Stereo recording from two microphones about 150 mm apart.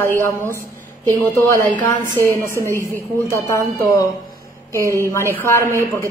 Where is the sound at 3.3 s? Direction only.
20° left (ahead or behind).